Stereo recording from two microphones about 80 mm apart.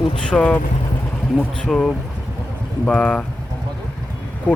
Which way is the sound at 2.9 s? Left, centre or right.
Centre.